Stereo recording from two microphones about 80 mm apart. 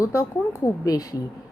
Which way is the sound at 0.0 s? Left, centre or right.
Left.